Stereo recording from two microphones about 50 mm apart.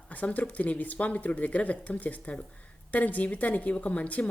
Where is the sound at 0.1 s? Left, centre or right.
Left.